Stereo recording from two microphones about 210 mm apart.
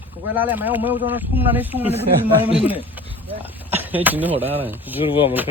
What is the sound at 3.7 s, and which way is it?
Speech, 10° right (ahead or behind).